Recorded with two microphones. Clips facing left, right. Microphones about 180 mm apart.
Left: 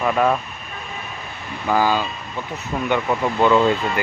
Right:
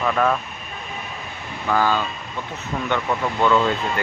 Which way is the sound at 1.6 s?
10° left (ahead or behind).